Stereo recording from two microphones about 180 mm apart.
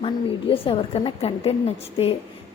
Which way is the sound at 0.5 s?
30° left (ahead or behind).